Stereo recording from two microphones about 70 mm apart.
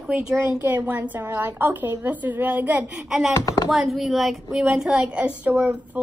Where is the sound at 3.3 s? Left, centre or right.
Left.